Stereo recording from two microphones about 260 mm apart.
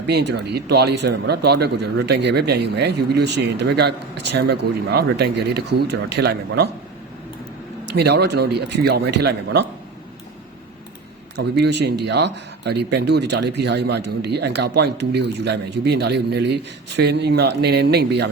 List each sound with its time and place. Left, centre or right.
0.1 s speech: right
7.9 s speech: right
11.3 s speech: right